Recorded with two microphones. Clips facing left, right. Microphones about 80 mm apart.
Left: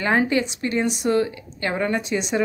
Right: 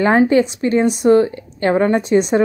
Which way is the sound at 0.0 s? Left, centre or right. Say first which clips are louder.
Right 8 dB; right.